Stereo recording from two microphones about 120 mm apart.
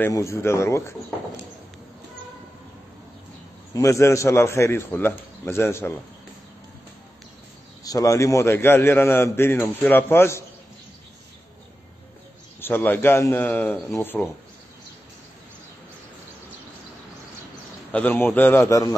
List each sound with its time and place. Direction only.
0.1 s a man's voice: 25° left (ahead or behind)
3.7 s a man's voice: 25° left (ahead or behind)
7.8 s a man's voice: 30° left (ahead or behind)
12.5 s a man's voice: 15° left (ahead or behind)
17.9 s a man's voice: 15° left (ahead or behind)
18.7 s a man's voice: 30° left (ahead or behind)